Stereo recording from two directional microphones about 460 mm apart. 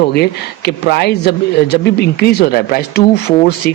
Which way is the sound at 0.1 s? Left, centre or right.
Left.